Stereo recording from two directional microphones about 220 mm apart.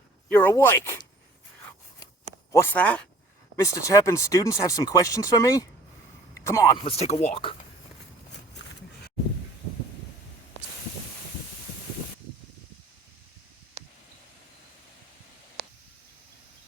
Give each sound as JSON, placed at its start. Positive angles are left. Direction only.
{"t": 0.3, "sound": "speech", "side_deg": 10}
{"t": 2.5, "sound": "speech", "side_deg": 10}
{"t": 6.8, "sound": "speech", "side_deg": 30}
{"t": 15.6, "sound": "a sound", "side_deg": -50}